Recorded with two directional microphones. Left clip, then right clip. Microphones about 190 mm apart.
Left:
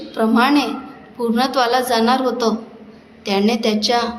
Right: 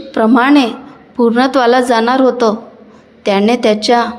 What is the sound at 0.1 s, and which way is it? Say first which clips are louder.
A woman's voice: right 6 dB; 40° right (ahead or behind).